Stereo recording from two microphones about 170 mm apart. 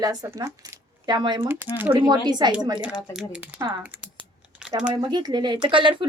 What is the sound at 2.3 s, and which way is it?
Speech, 25° right (ahead or behind).